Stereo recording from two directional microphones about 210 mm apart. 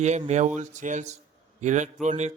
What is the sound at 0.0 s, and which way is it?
A man's voice, 30° right (ahead or behind).